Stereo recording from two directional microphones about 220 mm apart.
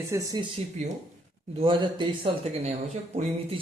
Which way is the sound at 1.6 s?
20° right (ahead or behind).